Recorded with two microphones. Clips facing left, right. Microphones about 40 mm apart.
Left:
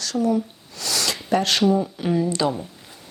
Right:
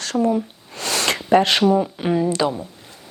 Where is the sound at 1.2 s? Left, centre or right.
Right.